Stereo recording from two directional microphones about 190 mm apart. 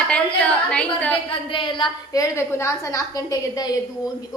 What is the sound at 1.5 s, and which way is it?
A woman's voice, 25° left (ahead or behind).